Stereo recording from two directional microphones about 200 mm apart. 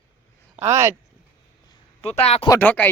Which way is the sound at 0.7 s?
15° right (ahead or behind).